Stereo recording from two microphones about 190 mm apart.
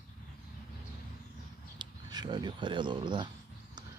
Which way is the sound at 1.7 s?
25° right (ahead or behind).